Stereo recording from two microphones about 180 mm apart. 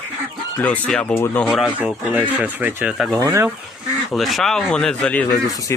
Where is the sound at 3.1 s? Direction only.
15° right (ahead or behind).